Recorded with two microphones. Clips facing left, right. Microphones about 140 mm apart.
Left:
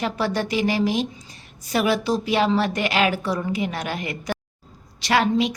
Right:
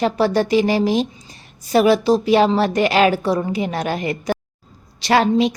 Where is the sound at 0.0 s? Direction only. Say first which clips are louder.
Right 7 dB; 35° right (ahead or behind).